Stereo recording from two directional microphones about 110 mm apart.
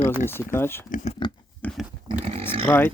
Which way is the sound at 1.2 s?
45° left (ahead or behind).